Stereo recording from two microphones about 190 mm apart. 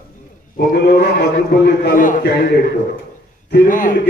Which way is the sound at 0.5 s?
50° left (ahead or behind).